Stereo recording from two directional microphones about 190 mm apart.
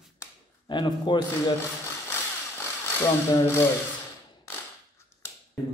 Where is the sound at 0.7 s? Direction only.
25° left (ahead or behind).